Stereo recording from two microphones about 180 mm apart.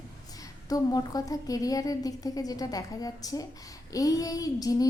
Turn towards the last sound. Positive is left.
turn(degrees=20)  # may be behind; listen again after turning